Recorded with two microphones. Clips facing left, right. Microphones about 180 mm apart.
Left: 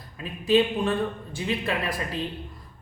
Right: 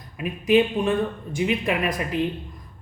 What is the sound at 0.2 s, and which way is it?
Speech, 15° right (ahead or behind).